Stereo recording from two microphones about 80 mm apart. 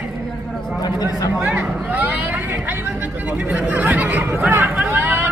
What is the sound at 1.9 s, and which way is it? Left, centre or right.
Chatter, right.